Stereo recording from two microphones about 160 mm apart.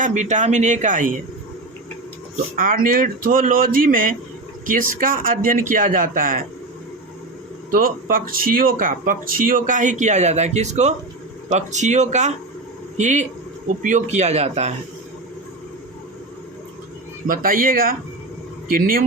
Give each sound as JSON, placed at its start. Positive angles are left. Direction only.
{"t": 0.0, "sound": "speech", "side_deg": -50}
{"t": 2.6, "sound": "speech", "side_deg": -60}
{"t": 7.7, "sound": "speech", "side_deg": -60}
{"t": 17.2, "sound": "speech", "side_deg": -60}